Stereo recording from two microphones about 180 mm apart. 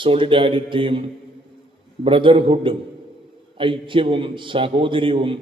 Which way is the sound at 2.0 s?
30° right (ahead or behind).